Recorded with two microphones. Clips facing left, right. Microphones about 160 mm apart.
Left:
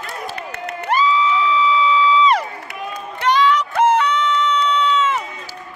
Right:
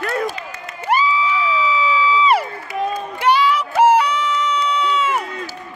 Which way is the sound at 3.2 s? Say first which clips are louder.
Even; 10° right (ahead or behind).